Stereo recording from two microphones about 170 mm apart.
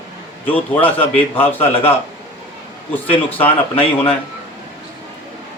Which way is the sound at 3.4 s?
35° left (ahead or behind).